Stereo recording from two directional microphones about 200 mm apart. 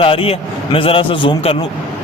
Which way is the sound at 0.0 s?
30° left (ahead or behind).